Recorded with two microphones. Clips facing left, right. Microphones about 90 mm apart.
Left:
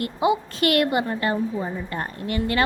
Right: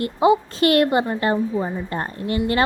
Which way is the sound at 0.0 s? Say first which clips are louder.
Right 5 dB; 30° right (ahead or behind).